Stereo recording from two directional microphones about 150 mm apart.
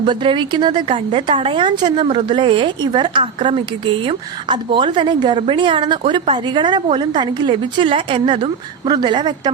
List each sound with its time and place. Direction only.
0.0 s a woman's voice: 30° right (ahead or behind)